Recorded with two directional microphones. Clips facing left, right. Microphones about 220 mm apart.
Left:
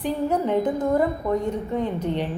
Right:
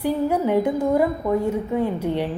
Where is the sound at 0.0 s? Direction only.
10° right (ahead or behind).